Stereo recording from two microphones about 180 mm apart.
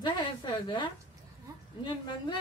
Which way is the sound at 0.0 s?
25° left (ahead or behind).